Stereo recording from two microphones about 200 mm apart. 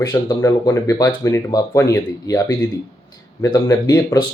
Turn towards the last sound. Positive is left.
turn(degrees=20)  # may be behind; listen again after turning